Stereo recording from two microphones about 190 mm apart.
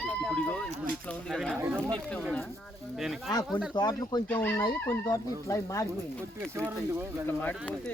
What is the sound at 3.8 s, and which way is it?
Speech, 20° left (ahead or behind).